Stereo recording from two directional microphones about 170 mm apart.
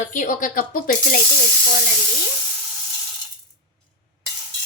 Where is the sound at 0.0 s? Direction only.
50° left (ahead or behind).